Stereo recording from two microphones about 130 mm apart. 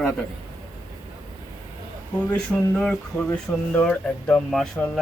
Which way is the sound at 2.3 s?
10° left (ahead or behind).